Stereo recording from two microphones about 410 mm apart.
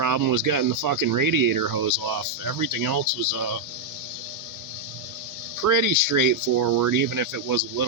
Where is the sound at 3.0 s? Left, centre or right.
Right.